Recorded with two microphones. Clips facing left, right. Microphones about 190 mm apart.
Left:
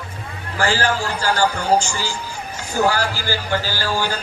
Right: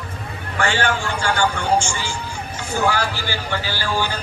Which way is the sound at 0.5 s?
35° left (ahead or behind).